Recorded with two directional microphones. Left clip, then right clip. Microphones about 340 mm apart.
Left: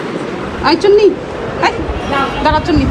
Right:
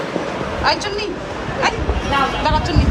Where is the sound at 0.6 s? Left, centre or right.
Centre.